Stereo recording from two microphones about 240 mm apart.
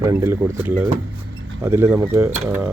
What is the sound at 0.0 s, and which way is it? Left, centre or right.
Speech, centre.